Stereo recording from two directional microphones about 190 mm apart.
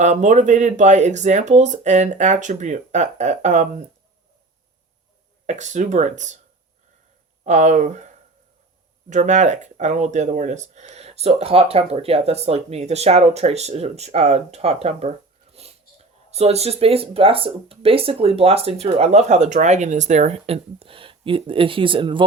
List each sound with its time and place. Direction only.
0.0 s speech: 40° right (ahead or behind)
5.5 s speech: 40° right (ahead or behind)
7.4 s speech: 40° right (ahead or behind)
9.0 s speech: 40° right (ahead or behind)
15.6 s wheeze: 35° right (ahead or behind)
16.3 s speech: 35° right (ahead or behind)